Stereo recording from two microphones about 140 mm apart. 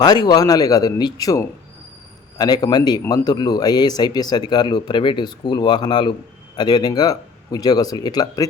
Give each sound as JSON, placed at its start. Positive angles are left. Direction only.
{"t": 0.0, "sound": "speech", "side_deg": 30}